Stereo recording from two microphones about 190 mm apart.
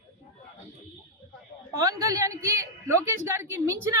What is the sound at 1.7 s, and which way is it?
A woman's voice, 15° right (ahead or behind).